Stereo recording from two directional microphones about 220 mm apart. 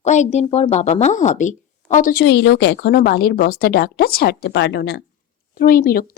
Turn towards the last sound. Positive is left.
turn(degrees=40)  # may be behind; listen again after turning